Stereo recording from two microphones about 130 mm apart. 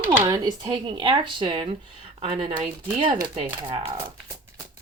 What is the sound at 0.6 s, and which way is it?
Speech, 45° right (ahead or behind).